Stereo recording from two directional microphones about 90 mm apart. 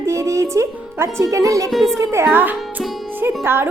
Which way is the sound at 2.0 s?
30° right (ahead or behind).